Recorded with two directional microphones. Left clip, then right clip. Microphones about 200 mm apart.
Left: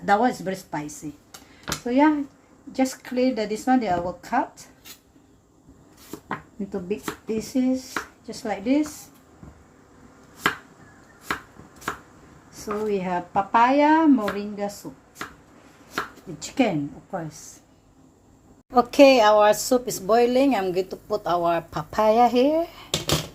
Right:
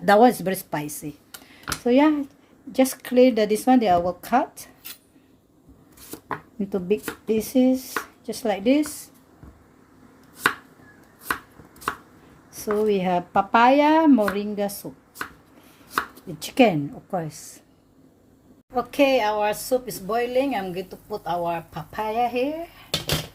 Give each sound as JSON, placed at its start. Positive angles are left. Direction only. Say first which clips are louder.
{"t": 0.0, "sound": "speech", "louder": "right 5 dB", "side_deg": -45}
{"t": 6.6, "sound": "speech", "louder": "right 8 dB", "side_deg": -50}
{"t": 12.5, "sound": "speech", "louder": "right 4 dB", "side_deg": -45}
{"t": 16.4, "sound": "speech", "louder": "right 5 dB", "side_deg": -45}
{"t": 18.7, "sound": "speech", "louder": "left 5 dB", "side_deg": 25}